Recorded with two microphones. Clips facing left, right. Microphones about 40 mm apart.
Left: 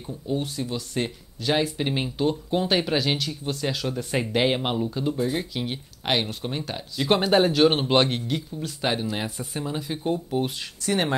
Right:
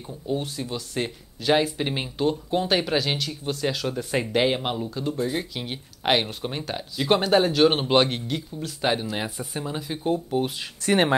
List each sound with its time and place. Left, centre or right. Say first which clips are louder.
0.0 s speech: even; centre
10.8 s speech: right 4 dB; right